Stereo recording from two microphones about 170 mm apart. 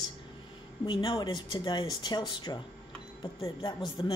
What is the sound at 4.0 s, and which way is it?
Speech, 25° left (ahead or behind).